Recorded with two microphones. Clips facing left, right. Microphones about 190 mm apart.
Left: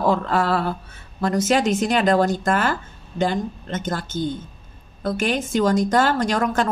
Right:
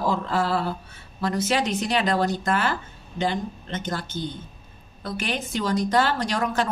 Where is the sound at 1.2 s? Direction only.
45° left (ahead or behind).